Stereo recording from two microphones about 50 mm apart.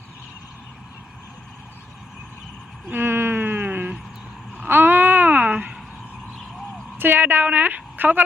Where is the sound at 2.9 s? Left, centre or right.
Right.